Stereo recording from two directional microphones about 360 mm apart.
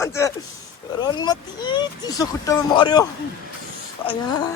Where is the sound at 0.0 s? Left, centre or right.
Centre.